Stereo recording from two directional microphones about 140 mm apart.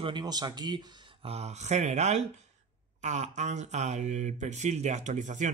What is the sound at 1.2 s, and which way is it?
Speech, 50° right (ahead or behind).